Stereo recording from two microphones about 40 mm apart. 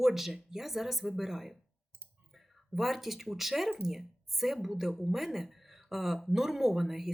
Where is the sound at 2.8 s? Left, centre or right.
Centre.